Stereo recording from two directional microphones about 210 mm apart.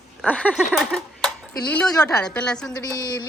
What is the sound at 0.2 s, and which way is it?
Speech, 5° left (ahead or behind).